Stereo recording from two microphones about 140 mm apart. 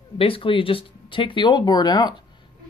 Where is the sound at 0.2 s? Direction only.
40° left (ahead or behind).